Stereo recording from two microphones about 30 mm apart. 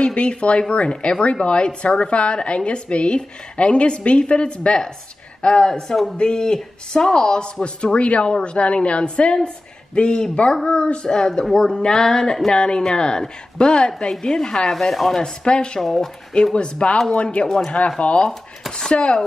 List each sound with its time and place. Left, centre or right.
0.0 s a woman's voice: left
7.6 s a woman's voice: left
11.9 s music: centre
12.5 s a woman's voice: left
14.7 s music: centre
15.4 s a woman's voice: left
15.8 s music: centre
16.5 s a woman's voice: left